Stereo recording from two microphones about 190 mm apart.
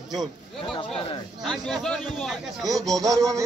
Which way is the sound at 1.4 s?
Centre (ahead or behind).